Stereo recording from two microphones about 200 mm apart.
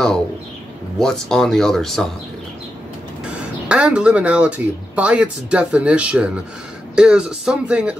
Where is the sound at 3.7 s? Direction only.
5° right (ahead or behind).